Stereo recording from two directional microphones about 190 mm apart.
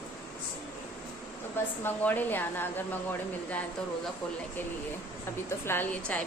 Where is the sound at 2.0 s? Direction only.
10° left (ahead or behind).